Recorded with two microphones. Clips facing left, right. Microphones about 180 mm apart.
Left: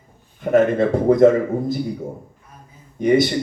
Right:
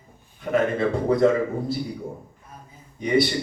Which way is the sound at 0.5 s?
50° left (ahead or behind).